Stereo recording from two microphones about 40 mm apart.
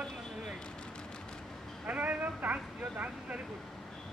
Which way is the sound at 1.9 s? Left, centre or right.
Right.